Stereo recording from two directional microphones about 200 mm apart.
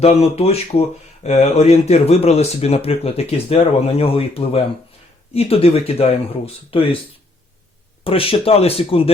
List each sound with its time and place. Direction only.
0.0 s speech: 30° left (ahead or behind)
8.0 s speech: 25° left (ahead or behind)